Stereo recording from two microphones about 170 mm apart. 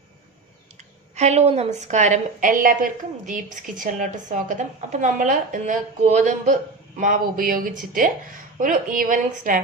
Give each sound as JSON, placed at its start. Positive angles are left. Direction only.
{"t": 1.1, "sound": "a woman's voice", "side_deg": -40}